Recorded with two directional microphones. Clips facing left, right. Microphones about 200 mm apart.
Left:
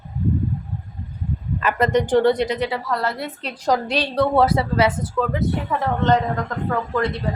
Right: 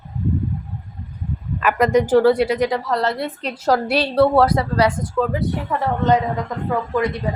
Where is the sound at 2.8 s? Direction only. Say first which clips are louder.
Right 3 dB; 25° right (ahead or behind).